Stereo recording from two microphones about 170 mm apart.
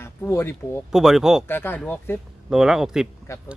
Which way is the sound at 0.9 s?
5° right (ahead or behind).